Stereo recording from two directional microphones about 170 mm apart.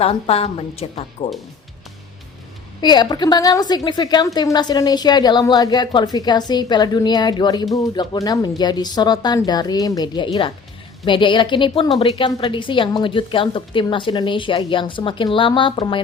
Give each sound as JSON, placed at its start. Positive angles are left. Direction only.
{"t": 0.0, "sound": "a woman's voice", "side_deg": 35}
{"t": 2.8, "sound": "a woman's voice", "side_deg": 25}